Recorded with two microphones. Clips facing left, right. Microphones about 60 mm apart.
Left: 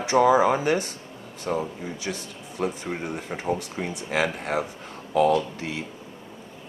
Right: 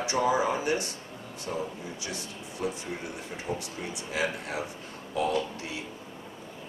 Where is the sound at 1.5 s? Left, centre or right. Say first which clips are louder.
Left 7 dB; left.